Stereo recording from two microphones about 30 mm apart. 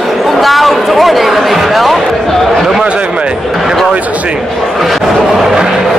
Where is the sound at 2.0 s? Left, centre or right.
Centre.